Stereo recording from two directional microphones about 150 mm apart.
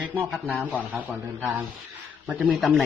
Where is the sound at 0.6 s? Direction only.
10° right (ahead or behind).